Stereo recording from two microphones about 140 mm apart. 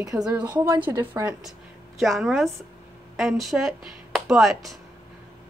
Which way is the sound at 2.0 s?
Centre (ahead or behind).